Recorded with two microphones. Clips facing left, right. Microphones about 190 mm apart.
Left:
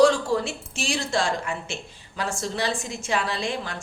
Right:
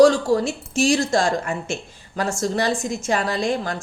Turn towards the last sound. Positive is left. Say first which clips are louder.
# right 6 dB
turn(degrees=-45)  # may be behind; listen again after turning